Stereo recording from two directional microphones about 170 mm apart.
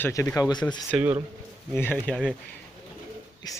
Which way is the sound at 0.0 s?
15° left (ahead or behind).